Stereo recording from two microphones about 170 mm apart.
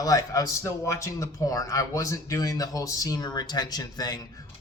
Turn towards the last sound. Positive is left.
turn(degrees=25)  # may be behind; listen again after turning